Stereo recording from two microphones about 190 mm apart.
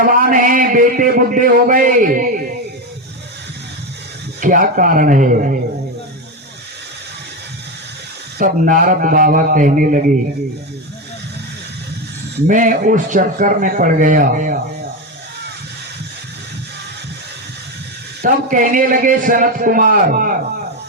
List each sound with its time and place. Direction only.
0.3 s a man's voice: 45° right (ahead or behind)
4.4 s a man's voice: 45° right (ahead or behind)
8.4 s a man's voice: 45° right (ahead or behind)
12.5 s a man's voice: 45° right (ahead or behind)
18.2 s a man's voice: 45° right (ahead or behind)